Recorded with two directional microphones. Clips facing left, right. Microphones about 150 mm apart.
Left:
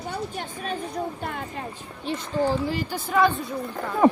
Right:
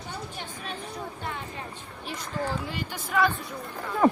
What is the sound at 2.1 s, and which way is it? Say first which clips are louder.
Speech: left 7 dB; 30° left (ahead or behind).